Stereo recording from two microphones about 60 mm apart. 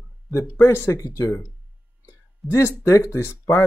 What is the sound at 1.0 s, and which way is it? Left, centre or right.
Speech, left.